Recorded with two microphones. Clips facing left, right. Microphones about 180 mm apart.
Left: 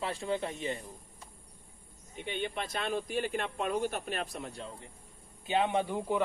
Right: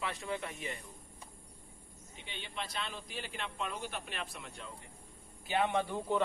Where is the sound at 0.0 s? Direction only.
30° left (ahead or behind).